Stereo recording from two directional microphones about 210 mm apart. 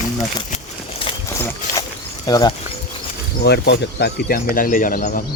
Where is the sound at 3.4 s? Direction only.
50° left (ahead or behind).